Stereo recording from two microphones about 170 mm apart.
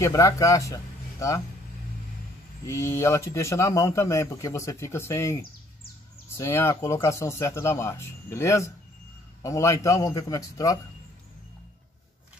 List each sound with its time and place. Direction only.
0.0 s a man's voice: 20° left (ahead or behind)
2.6 s a man's voice: 15° left (ahead or behind)